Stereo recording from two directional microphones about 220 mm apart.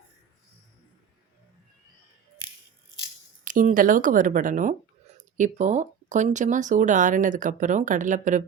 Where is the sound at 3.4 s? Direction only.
35° right (ahead or behind).